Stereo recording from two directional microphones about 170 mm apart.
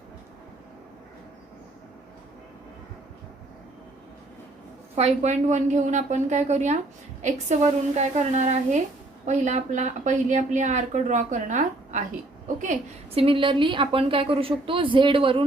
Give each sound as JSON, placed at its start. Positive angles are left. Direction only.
{"t": 4.9, "sound": "a woman's voice", "side_deg": -40}
{"t": 13.2, "sound": "a woman's voice", "side_deg": -30}